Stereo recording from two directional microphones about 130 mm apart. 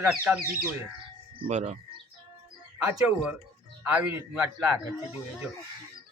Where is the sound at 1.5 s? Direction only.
60° right (ahead or behind).